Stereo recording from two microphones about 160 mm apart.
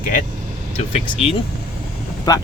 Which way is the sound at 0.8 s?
40° left (ahead or behind).